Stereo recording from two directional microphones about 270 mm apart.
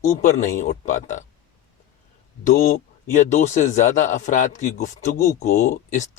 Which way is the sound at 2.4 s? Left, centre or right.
Left.